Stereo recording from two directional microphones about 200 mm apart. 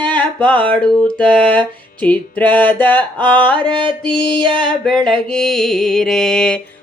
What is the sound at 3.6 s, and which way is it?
Music, 25° right (ahead or behind).